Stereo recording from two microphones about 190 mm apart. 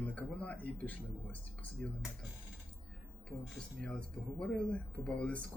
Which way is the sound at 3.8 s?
5° left (ahead or behind).